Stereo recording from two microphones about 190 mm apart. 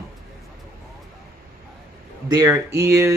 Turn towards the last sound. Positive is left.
turn(degrees=-15)  # may be behind; listen again after turning